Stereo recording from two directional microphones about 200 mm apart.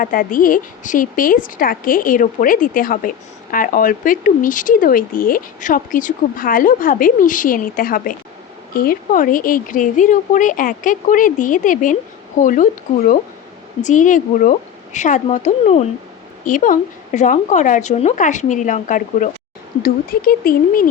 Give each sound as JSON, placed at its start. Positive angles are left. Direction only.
{"t": 0.0, "sound": "speech", "side_deg": 45}
{"t": 13.8, "sound": "speech", "side_deg": 40}